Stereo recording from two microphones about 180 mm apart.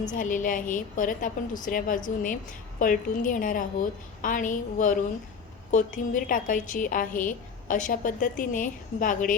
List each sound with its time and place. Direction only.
0.1 s a woman's voice: 45° left (ahead or behind)